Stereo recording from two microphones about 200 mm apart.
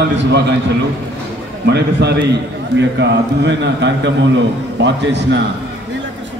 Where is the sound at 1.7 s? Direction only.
55° right (ahead or behind).